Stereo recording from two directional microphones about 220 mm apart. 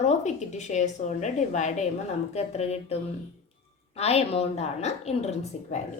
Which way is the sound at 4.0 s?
30° left (ahead or behind).